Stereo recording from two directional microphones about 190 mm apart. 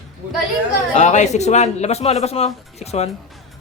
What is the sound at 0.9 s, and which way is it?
A man's voice, 40° left (ahead or behind).